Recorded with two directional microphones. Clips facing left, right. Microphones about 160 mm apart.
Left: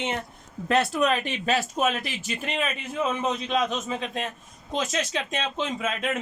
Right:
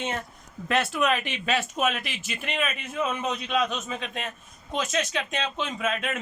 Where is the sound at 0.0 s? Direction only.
20° left (ahead or behind).